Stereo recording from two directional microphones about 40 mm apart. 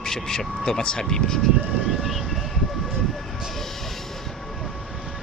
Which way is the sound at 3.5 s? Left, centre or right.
Centre.